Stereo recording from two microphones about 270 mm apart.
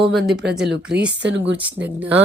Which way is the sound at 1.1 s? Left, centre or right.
Right.